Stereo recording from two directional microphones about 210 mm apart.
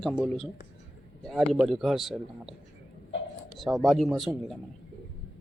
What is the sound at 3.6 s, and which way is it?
Speech, centre (ahead or behind).